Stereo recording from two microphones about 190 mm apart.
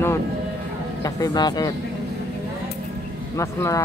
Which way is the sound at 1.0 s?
20° left (ahead or behind).